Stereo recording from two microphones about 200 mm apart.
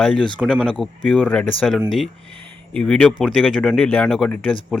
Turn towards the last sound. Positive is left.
turn(degrees=5)  # may be behind; listen again after turning